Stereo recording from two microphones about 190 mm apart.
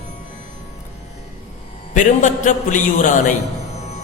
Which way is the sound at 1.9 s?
40° left (ahead or behind).